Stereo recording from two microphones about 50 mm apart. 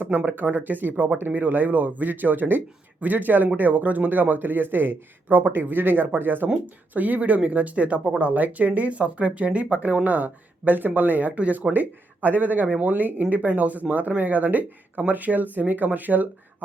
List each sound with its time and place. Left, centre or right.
0.3 s speech: right